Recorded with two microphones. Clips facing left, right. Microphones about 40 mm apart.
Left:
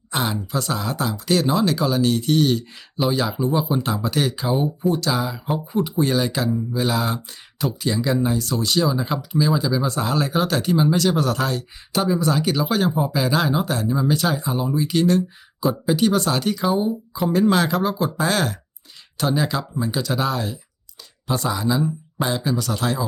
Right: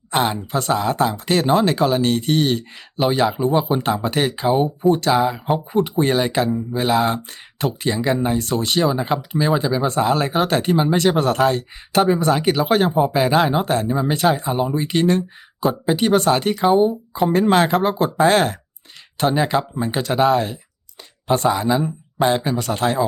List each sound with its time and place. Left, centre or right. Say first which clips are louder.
0.1 s speech: right 4 dB; right